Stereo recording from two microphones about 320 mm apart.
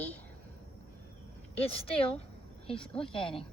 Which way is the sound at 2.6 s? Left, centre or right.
Centre.